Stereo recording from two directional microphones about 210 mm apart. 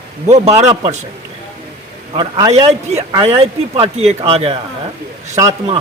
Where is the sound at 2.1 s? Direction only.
20° right (ahead or behind).